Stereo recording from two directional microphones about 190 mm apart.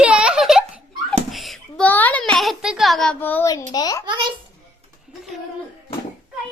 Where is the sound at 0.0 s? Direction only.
5° right (ahead or behind).